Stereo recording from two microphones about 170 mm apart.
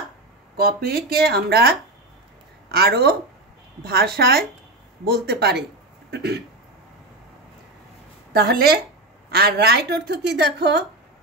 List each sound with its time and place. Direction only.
0.6 s a woman's voice: 60° right (ahead or behind)
6.0 s a sound: 70° right (ahead or behind)
8.3 s a woman's voice: 65° right (ahead or behind)